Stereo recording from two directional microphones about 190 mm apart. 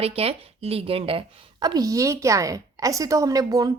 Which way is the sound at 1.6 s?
20° right (ahead or behind).